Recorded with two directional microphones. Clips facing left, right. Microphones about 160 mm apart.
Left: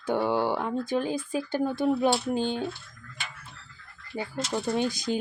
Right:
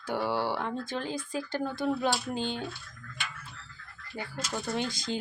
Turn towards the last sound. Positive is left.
turn(degrees=-20)  # may be behind; listen again after turning